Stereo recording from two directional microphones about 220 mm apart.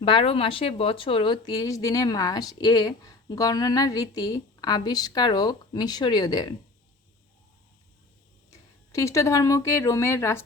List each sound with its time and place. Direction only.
0.0 s speech: 25° left (ahead or behind)
8.9 s speech: 15° left (ahead or behind)